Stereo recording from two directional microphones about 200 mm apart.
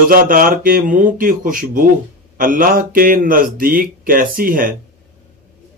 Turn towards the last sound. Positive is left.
turn(degrees=-45)  # may be behind; listen again after turning